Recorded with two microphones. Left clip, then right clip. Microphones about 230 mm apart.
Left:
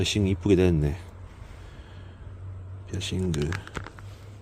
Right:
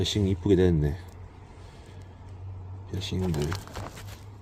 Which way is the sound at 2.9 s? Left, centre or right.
Centre.